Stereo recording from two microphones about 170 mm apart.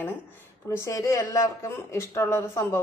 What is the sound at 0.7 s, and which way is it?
A woman's voice, 15° left (ahead or behind).